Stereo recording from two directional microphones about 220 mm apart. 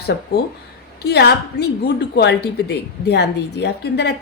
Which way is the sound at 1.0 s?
50° left (ahead or behind).